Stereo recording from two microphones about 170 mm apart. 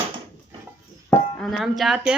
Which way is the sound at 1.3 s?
Centre (ahead or behind).